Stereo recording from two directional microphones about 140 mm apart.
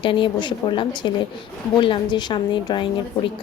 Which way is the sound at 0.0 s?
35° left (ahead or behind).